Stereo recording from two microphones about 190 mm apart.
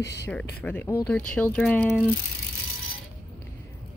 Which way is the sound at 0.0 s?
60° left (ahead or behind).